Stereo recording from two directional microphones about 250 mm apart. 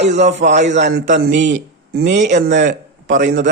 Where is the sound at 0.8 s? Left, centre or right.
Right.